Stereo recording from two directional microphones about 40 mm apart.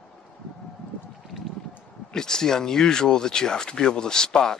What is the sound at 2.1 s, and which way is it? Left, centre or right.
Speech, centre.